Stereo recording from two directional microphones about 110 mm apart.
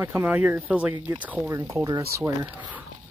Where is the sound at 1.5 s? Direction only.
30° right (ahead or behind).